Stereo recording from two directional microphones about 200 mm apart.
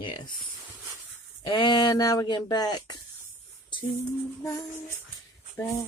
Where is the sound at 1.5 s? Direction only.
20° left (ahead or behind).